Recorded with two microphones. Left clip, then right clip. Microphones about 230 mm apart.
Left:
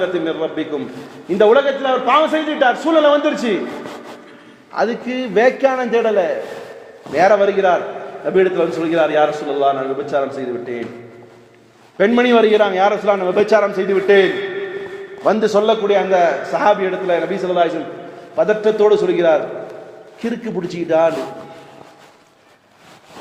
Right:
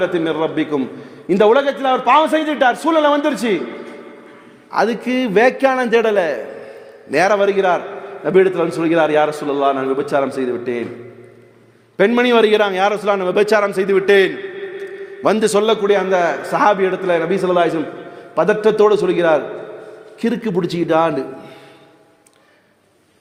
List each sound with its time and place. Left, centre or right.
0.0 s a man's voice: right
4.7 s a man's voice: right
11.9 s a man's voice: right